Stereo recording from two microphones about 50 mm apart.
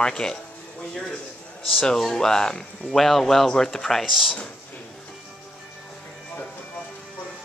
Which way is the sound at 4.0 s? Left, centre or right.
Centre.